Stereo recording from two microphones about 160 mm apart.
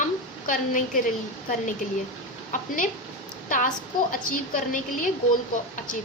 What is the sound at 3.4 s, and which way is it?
A child's voice, 55° left (ahead or behind).